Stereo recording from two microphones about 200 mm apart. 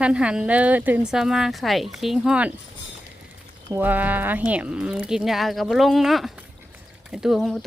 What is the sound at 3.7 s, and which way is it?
Speech, 10° right (ahead or behind).